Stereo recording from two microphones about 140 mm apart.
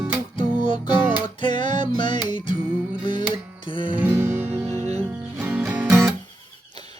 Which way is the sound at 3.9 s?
15° right (ahead or behind).